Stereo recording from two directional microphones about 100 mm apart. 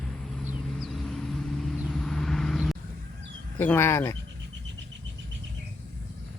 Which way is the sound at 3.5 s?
25° left (ahead or behind).